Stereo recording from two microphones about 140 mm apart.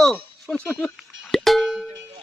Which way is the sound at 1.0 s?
Centre (ahead or behind).